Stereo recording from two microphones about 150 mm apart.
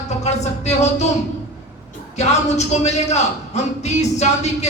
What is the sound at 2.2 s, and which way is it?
Speech, 50° left (ahead or behind).